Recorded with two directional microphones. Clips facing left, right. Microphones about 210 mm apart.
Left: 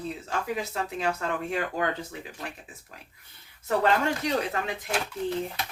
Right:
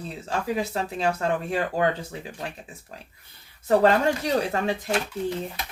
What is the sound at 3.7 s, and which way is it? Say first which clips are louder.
Speech: right 5 dB; 30° right (ahead or behind).